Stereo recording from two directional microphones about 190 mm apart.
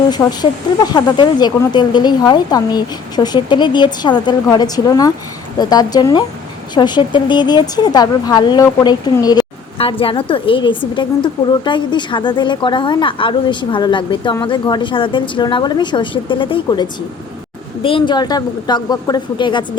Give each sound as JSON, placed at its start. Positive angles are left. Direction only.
{"t": 0.1, "sound": "a woman's voice", "side_deg": 20}